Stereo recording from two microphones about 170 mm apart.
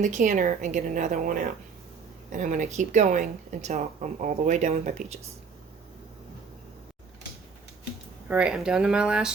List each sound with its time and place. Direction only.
0.0 s speech: 50° right (ahead or behind)
8.3 s speech: 5° right (ahead or behind)